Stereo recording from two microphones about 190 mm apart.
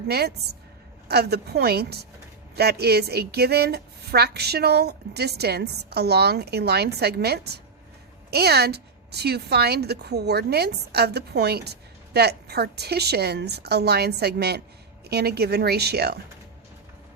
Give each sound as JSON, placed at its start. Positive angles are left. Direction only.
{"t": 0.1, "sound": "speech", "side_deg": -55}